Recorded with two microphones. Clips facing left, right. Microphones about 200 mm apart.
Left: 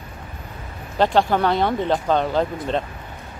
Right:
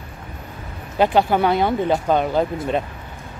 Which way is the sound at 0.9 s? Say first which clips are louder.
Right 1 dB; 10° right (ahead or behind).